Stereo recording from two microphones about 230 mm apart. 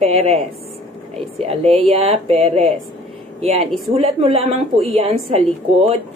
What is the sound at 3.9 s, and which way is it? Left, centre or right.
A woman's voice, right.